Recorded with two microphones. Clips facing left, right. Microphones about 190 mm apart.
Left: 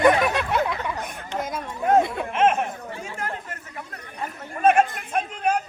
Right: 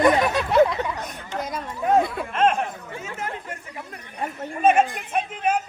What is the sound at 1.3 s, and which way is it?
Speech, centre (ahead or behind).